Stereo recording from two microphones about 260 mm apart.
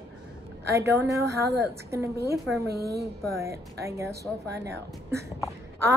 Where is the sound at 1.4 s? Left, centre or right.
Centre.